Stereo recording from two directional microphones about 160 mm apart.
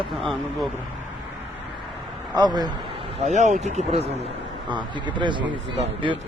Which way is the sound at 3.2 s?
50° right (ahead or behind).